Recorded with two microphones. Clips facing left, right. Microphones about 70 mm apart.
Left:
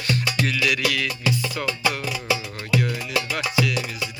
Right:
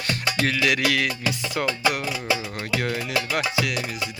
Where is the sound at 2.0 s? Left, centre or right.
Right.